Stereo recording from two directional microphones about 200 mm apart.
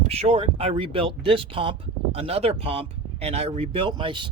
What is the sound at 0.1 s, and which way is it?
Speech, 30° right (ahead or behind).